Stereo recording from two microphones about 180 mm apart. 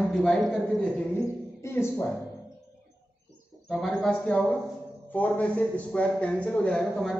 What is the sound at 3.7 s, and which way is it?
Speech, centre (ahead or behind).